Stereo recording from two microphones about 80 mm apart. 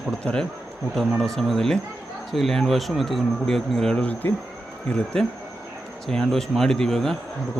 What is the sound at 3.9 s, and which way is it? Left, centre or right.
Insect, centre.